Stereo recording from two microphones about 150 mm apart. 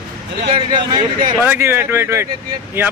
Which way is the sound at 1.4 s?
15° right (ahead or behind).